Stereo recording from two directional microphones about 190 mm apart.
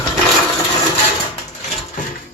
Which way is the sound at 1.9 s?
45° left (ahead or behind).